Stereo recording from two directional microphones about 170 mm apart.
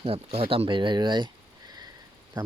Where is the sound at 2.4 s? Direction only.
25° right (ahead or behind).